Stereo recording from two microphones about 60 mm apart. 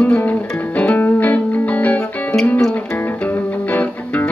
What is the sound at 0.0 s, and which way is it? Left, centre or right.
Music, left.